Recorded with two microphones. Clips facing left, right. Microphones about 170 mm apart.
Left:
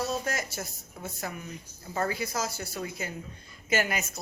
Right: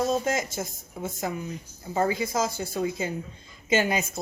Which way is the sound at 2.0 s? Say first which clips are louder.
Right 5 dB; 20° right (ahead or behind).